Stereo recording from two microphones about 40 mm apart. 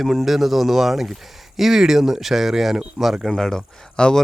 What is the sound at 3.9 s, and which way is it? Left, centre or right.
Speech, left.